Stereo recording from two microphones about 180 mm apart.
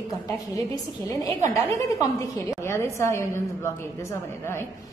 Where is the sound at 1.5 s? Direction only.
20° left (ahead or behind).